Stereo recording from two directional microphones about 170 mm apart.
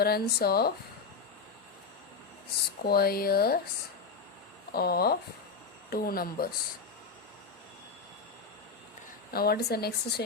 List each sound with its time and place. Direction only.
0.0 s speech: 65° left (ahead or behind)
2.8 s speech: 65° left (ahead or behind)
4.7 s speech: 65° left (ahead or behind)
9.3 s speech: 65° left (ahead or behind)